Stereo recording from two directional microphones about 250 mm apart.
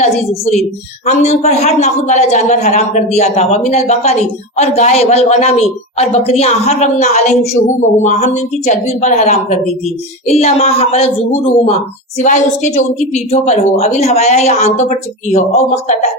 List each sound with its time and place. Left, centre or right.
0.0 s a woman's voice: left
12.2 s a woman's voice: left